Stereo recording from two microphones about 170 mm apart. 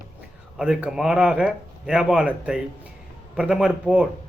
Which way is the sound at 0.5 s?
5° right (ahead or behind).